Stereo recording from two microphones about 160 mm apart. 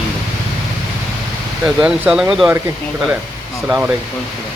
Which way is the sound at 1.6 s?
5° right (ahead or behind).